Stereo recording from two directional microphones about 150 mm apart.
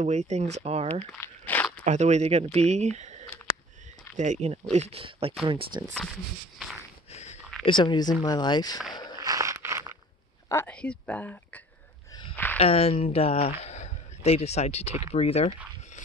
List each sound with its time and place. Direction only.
0.0 s speech: 50° right (ahead or behind)
1.2 s crunch: 10° left (ahead or behind)
1.9 s speech: 50° right (ahead or behind)
4.2 s speech: 50° right (ahead or behind); by 5.9 s 35° right (ahead or behind)
7.1 s a sound: 50° left (ahead or behind)
7.6 s speech: 30° left (ahead or behind)
8.9 s walk: 30° left (ahead or behind)
9.2 s a sound: 20° right (ahead or behind)
10.5 s speech: 10° left (ahead or behind)
12.1 s a sound: 30° left (ahead or behind)
12.5 s speech: 40° left (ahead or behind)